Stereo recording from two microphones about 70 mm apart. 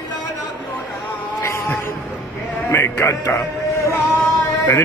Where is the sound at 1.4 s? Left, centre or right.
Left.